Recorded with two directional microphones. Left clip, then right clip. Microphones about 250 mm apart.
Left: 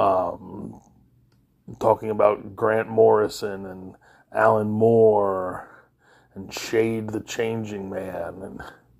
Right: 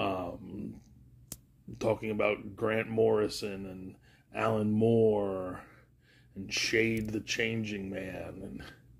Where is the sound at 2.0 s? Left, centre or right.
Centre.